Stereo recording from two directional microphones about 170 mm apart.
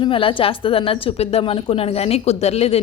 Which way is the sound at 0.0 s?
30° left (ahead or behind).